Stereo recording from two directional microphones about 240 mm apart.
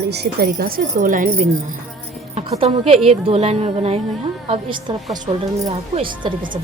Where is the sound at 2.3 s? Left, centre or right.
Right.